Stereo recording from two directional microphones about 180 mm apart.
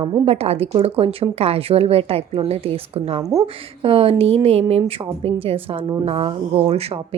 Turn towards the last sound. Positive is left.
turn(degrees=-35)  # may be behind; listen again after turning